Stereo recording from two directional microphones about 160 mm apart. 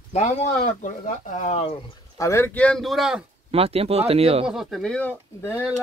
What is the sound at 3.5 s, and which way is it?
Speech, 35° right (ahead or behind).